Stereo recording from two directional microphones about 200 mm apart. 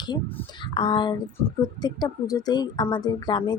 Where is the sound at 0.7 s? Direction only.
25° left (ahead or behind).